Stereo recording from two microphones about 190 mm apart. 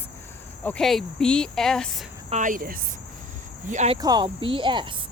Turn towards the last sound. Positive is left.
turn(degrees=-25)  # may be behind; listen again after turning